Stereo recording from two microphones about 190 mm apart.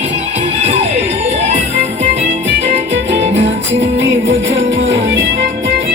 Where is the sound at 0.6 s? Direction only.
35° right (ahead or behind).